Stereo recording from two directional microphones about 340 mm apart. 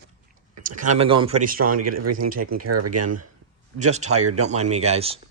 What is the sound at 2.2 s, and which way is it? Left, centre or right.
Speech, right.